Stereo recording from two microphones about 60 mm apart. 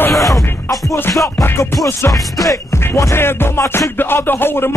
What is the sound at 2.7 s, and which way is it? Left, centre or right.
Music, left.